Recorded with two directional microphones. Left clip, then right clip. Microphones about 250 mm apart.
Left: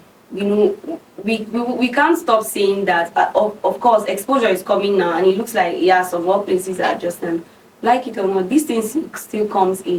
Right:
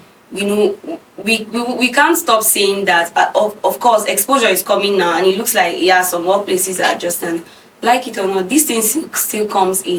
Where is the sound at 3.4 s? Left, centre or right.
Left.